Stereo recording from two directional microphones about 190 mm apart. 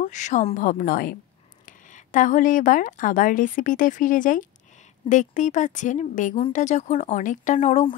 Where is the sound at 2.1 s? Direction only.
45° left (ahead or behind).